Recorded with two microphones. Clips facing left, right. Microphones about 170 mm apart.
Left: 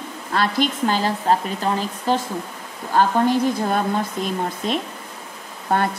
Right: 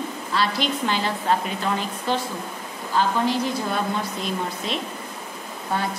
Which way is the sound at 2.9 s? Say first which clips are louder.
Left 4 dB; 50° left (ahead or behind).